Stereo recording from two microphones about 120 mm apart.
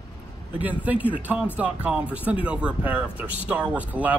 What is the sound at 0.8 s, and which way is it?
Speech, 15° right (ahead or behind).